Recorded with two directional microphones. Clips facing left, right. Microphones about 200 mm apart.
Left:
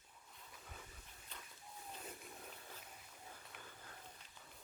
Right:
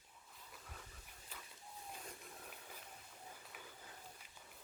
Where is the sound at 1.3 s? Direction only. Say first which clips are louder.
Even; 5° right (ahead or behind).